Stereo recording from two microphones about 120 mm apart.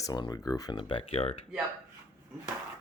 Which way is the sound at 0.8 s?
45° left (ahead or behind).